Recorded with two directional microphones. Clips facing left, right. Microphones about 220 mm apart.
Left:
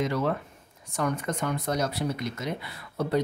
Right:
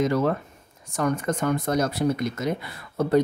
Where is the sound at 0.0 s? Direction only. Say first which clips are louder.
Right 5 dB; 45° right (ahead or behind).